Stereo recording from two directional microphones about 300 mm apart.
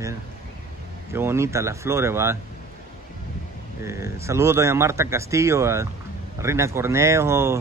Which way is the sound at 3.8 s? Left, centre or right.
Centre.